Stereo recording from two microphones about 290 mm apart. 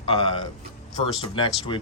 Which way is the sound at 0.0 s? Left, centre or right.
Centre.